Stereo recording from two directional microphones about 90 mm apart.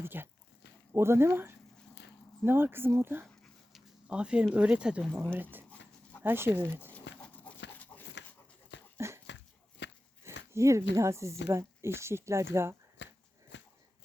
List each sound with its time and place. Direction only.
0.0 s speech: 25° right (ahead or behind)
3.4 s dog: centre (ahead or behind)
4.1 s speech: 10° right (ahead or behind)
5.2 s speech: 20° right (ahead or behind)
6.9 s dog: 15° left (ahead or behind)
9.0 s dog: 30° right (ahead or behind)
10.2 s speech: 30° right (ahead or behind)